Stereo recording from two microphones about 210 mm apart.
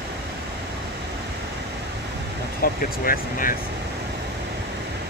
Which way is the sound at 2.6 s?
45° left (ahead or behind).